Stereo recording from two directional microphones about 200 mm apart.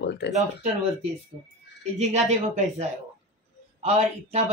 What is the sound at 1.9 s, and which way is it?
Speech, 35° right (ahead or behind).